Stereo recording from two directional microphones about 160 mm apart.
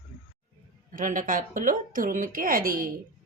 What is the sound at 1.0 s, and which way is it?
A woman's voice, 55° right (ahead or behind).